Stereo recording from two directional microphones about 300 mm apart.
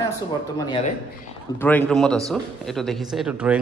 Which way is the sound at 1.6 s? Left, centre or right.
Centre.